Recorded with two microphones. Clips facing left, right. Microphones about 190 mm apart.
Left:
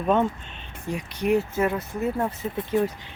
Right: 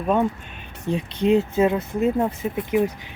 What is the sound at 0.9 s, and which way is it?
Speech, 25° right (ahead or behind).